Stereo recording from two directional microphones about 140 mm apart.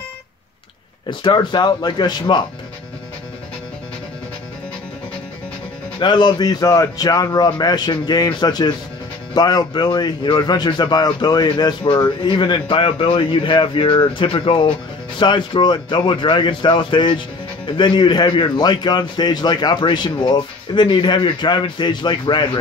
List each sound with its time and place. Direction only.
1.2 s speech: 35° left (ahead or behind)
5.9 s a man's voice: 35° left (ahead or behind)